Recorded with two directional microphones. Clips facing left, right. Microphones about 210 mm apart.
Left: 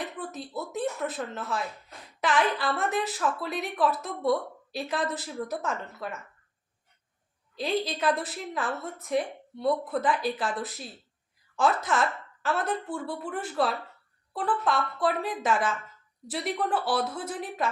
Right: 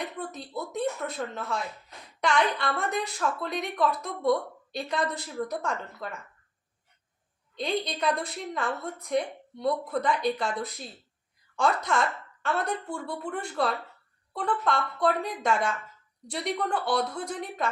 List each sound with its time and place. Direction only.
0.0 s a sound: 5° left (ahead or behind)
2.2 s a woman's voice: 5° left (ahead or behind)
7.5 s a woman's voice: 5° left (ahead or behind)